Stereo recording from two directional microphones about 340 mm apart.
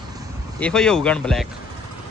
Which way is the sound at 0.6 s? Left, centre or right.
Centre.